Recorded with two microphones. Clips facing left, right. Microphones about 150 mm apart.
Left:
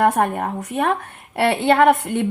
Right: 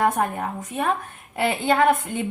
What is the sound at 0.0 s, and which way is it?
A woman's voice, 70° left (ahead or behind).